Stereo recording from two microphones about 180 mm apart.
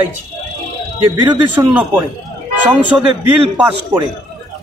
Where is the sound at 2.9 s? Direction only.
10° right (ahead or behind).